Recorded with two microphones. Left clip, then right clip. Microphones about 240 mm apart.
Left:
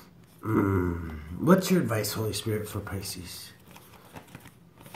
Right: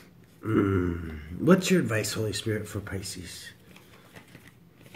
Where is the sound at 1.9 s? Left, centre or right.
Left.